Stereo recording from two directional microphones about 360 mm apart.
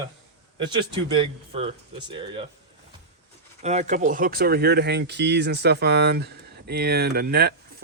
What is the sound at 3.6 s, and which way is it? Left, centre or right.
Speech, centre.